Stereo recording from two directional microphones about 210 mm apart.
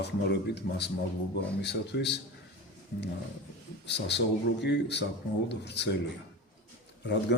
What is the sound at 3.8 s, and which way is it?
A man's voice, 55° left (ahead or behind).